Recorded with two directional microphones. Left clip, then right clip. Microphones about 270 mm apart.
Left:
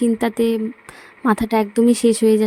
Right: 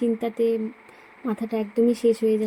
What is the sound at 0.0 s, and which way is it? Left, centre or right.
Speech, left.